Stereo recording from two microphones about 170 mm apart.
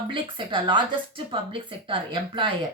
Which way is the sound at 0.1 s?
30° right (ahead or behind).